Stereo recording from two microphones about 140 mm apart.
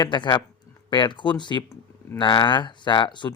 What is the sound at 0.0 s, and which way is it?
Speech, 35° left (ahead or behind).